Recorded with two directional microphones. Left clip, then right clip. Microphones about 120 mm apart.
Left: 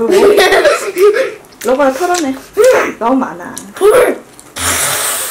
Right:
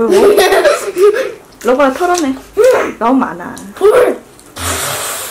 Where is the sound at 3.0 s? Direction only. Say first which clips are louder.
Right 1 dB; 30° right (ahead or behind).